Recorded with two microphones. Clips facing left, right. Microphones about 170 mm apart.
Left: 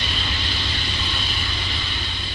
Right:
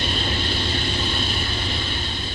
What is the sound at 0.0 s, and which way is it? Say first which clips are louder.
Vehicle: right 5 dB; 50° right (ahead or behind).